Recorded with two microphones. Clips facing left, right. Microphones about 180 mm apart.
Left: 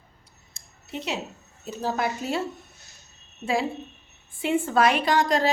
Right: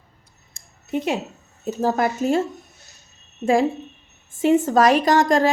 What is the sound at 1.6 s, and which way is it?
Speech, 45° right (ahead or behind).